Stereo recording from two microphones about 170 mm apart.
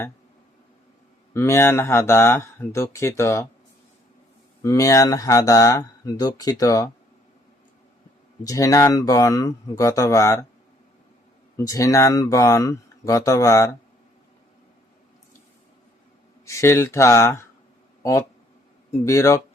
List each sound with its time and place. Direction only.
1.3 s speech: 15° left (ahead or behind)
4.6 s speech: 20° left (ahead or behind)
8.4 s speech: 20° left (ahead or behind)
11.5 s speech: 20° left (ahead or behind)
16.5 s speech: 15° left (ahead or behind)